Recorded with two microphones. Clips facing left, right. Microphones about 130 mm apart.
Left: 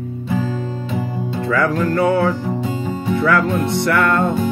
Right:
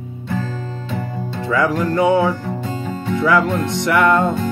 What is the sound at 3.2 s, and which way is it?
Music, 20° right (ahead or behind).